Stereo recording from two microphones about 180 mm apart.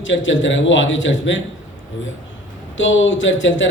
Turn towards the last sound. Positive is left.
turn(degrees=90)